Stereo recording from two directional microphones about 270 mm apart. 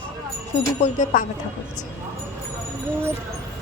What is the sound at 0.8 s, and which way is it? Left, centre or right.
Speech, left.